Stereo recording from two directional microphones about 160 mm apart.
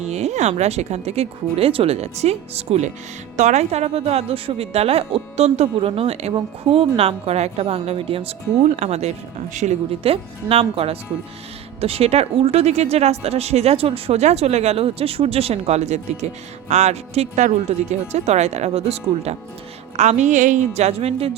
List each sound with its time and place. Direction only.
0.0 s speech: 45° right (ahead or behind)